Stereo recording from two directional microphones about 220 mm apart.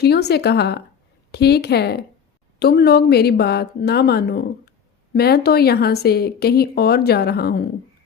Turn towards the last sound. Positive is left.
turn(degrees=45)  # may be behind; listen again after turning